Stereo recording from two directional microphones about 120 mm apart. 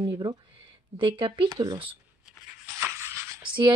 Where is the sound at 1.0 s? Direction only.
45° right (ahead or behind).